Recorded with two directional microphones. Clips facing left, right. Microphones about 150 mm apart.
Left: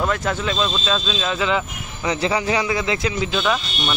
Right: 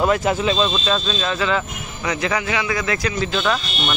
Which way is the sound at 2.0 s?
30° left (ahead or behind).